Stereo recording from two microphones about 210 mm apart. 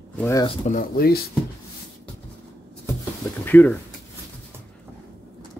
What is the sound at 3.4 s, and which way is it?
Speech, 10° left (ahead or behind).